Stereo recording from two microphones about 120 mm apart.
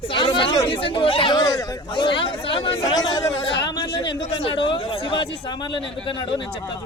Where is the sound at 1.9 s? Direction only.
45° left (ahead or behind).